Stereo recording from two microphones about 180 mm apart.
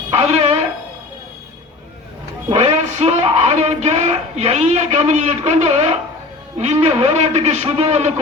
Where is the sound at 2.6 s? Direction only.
35° right (ahead or behind).